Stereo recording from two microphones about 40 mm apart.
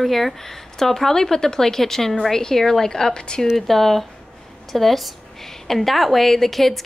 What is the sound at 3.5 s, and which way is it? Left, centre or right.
Speech, centre.